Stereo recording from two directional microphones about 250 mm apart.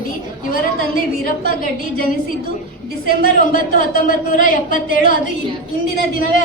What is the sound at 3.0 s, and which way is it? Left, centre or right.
Speech, left.